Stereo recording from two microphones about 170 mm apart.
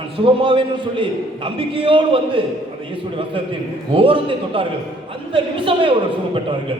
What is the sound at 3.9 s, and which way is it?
A man's voice, 30° right (ahead or behind).